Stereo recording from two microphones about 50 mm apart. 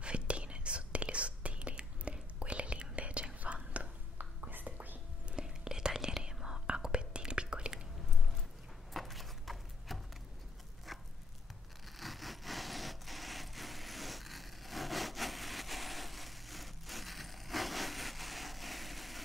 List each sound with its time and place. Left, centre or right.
0.0 s whispering: right
4.2 s whispering: right
5.3 s whispering: centre
8.9 s a sound: centre